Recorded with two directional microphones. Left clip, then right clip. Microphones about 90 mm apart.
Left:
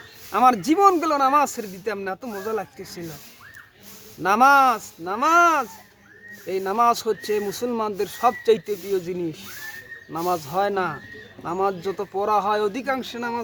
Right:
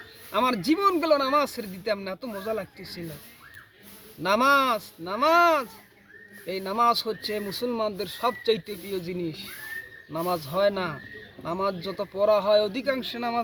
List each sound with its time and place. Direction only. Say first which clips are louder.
0.3 s speech: left 6 dB; 30° left (ahead or behind)
4.2 s speech: left 6 dB; 30° left (ahead or behind)